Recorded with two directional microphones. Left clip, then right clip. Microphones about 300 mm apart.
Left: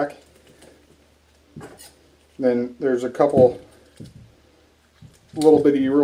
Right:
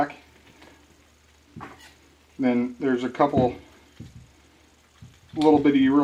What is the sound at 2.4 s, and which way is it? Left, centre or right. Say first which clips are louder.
Speech: left 4 dB; right.